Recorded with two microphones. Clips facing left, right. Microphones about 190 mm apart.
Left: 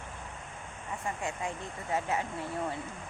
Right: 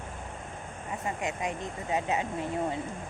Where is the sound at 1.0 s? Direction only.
20° right (ahead or behind).